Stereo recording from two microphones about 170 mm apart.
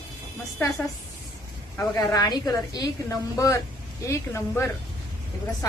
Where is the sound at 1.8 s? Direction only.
20° left (ahead or behind).